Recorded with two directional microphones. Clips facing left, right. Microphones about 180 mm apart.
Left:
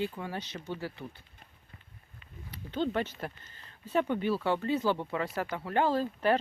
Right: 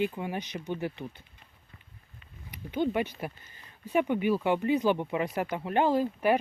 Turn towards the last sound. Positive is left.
turn(degrees=-15)  # may be behind; listen again after turning